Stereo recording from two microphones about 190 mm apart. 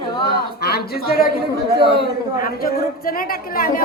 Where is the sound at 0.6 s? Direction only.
55° left (ahead or behind).